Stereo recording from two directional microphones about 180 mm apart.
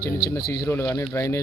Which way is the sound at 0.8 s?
20° left (ahead or behind).